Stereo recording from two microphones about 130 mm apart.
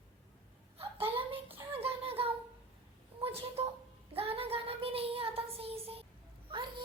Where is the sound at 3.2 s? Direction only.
50° right (ahead or behind).